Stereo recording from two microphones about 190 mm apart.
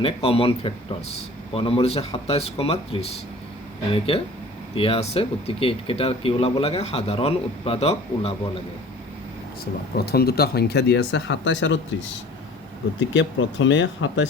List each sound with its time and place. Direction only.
0.0 s speech: 30° left (ahead or behind)
10.1 s speech: 55° left (ahead or behind); by 11.8 s 75° left (ahead or behind)
13.1 s speech: 75° left (ahead or behind)